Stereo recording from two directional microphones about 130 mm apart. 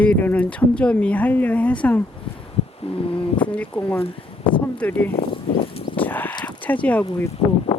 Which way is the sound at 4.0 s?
40° left (ahead or behind).